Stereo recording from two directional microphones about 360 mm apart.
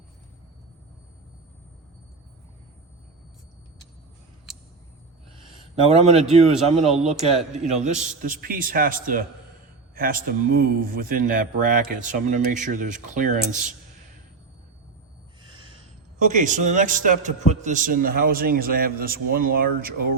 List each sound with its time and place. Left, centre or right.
5.9 s speech: centre
6.7 s a man's voice: centre
7.3 s speech: centre
15.4 s a sound: centre
16.3 s speech: right